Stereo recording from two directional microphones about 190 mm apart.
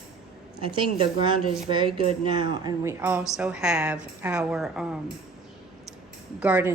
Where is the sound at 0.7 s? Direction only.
25° right (ahead or behind); by 4.9 s centre (ahead or behind).